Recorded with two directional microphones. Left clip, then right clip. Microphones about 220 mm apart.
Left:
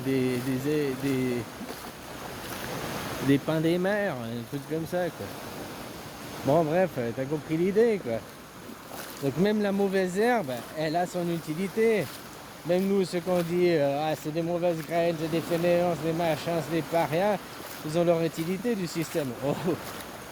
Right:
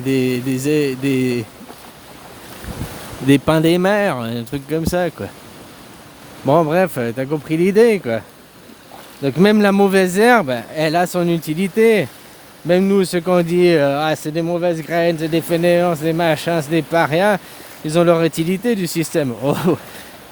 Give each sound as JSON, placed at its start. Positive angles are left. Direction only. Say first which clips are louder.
{"t": 0.1, "sound": "speech", "louder": "right 9 dB", "side_deg": -45}
{"t": 3.2, "sound": "speech", "louder": "right 12 dB", "side_deg": -45}
{"t": 6.5, "sound": "speech", "louder": "right 10 dB", "side_deg": -50}
{"t": 9.2, "sound": "speech", "louder": "right 13 dB", "side_deg": -45}